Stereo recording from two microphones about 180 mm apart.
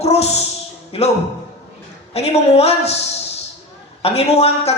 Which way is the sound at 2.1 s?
35° left (ahead or behind).